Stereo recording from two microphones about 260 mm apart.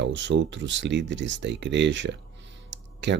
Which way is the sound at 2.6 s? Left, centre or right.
Right.